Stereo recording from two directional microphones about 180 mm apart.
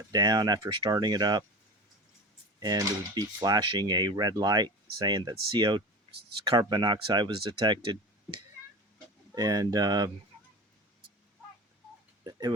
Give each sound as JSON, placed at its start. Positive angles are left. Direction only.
{"t": 0.1, "sound": "speech", "side_deg": -20}
{"t": 2.6, "sound": "speech", "side_deg": -20}
{"t": 12.2, "sound": "a sound", "side_deg": -20}